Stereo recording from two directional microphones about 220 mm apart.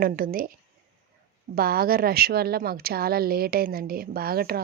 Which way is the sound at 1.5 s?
45° right (ahead or behind).